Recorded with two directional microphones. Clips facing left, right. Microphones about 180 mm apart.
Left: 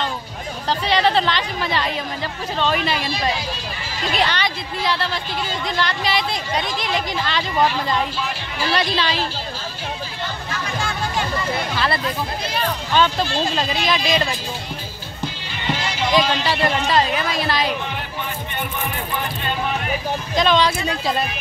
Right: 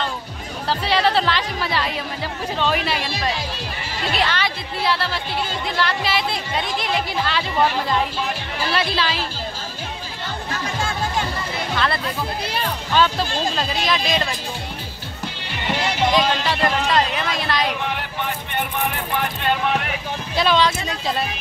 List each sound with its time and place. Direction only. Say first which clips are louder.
0.7 s speech: left 1 dB; 5° right (ahead or behind)
4.1 s speech: left 1 dB; centre (ahead or behind)
8.7 s speech: left 1 dB; 5° right (ahead or behind)
11.7 s speech: right 3 dB; 5° left (ahead or behind)
13.8 s speech: left 1 dB; centre (ahead or behind)
16.2 s speech: left 1 dB; centre (ahead or behind)
19.1 s a sound: right 4 dB; 70° right (ahead or behind)
20.3 s speech: left 1 dB; 5° right (ahead or behind)